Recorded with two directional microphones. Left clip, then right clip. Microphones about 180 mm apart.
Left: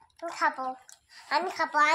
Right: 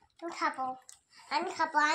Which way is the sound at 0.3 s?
45° left (ahead or behind).